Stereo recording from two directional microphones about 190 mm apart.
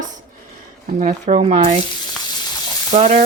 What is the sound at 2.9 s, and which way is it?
Speech, 40° right (ahead or behind).